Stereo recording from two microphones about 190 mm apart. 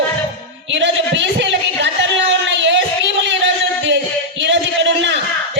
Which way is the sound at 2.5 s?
70° right (ahead or behind).